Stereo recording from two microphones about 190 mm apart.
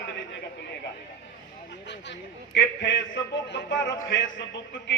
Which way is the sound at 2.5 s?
65° left (ahead or behind).